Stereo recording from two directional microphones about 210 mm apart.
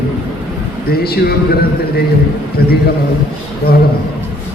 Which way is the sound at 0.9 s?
50° left (ahead or behind).